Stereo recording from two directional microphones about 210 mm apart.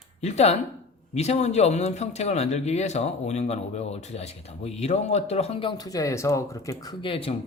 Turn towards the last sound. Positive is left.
turn(degrees=25)  # may be behind; listen again after turning